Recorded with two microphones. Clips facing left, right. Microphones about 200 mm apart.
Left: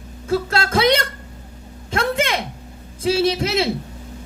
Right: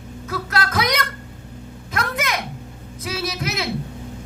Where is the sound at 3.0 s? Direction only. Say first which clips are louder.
Left 9 dB; 30° left (ahead or behind).